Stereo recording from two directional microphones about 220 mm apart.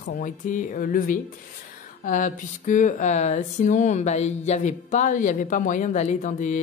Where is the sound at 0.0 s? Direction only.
35° left (ahead or behind).